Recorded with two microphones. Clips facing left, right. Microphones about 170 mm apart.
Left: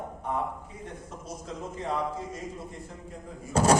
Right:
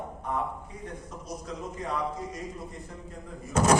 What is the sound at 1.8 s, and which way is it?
Speech, 25° left (ahead or behind).